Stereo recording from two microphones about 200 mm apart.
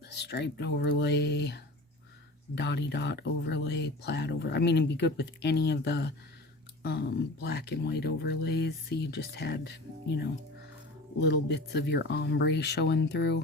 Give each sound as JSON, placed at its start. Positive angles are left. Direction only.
{"t": 0.0, "sound": "speech", "side_deg": 55}